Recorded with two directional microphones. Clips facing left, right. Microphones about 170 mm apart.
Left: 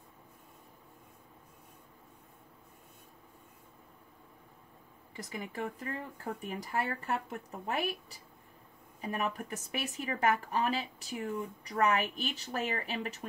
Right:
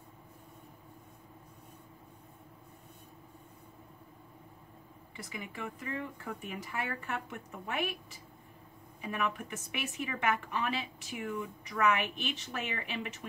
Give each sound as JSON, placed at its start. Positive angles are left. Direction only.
{"t": 5.1, "sound": "a woman's voice", "side_deg": 40}